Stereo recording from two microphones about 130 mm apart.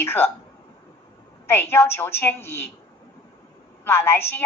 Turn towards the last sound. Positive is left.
turn(degrees=20)  # may be behind; listen again after turning